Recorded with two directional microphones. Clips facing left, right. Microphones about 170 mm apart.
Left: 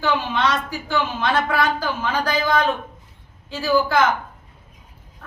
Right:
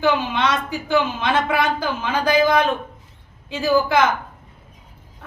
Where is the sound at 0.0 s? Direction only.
20° right (ahead or behind).